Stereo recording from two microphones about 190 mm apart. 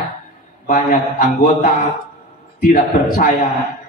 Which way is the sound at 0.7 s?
45° left (ahead or behind).